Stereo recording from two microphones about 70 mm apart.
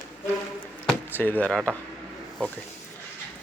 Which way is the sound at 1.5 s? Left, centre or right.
Centre.